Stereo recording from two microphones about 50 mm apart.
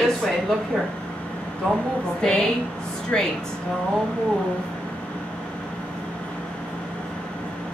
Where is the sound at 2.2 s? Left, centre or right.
Centre.